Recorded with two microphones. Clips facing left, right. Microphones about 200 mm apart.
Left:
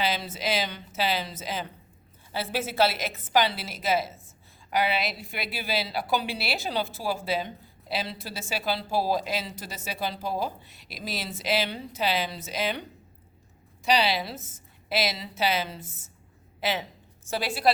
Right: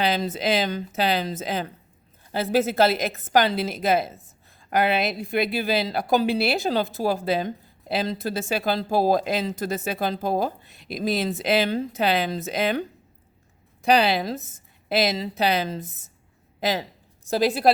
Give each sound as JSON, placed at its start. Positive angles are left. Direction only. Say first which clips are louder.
{"t": 0.2, "sound": "a woman's voice", "louder": "right 6 dB", "side_deg": -50}
{"t": 13.8, "sound": "a woman's voice", "louder": "right 5 dB", "side_deg": -50}